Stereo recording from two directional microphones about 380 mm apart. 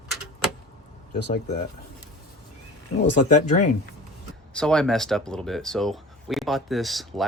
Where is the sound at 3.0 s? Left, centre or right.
Left.